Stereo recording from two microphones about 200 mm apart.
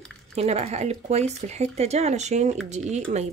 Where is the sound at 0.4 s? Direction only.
30° right (ahead or behind).